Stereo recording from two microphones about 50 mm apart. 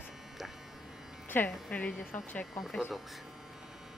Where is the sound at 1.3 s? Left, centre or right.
Left.